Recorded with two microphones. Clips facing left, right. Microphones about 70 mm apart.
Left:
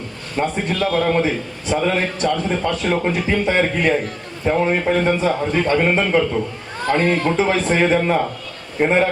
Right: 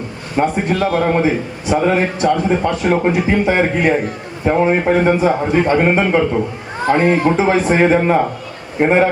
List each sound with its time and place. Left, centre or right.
0.3 s a man's voice: right
7.8 s a man's voice: right